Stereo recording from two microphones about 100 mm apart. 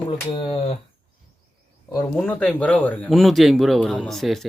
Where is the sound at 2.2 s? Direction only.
15° left (ahead or behind).